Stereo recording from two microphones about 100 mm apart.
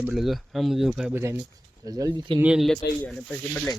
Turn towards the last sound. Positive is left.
turn(degrees=5)  # may be behind; listen again after turning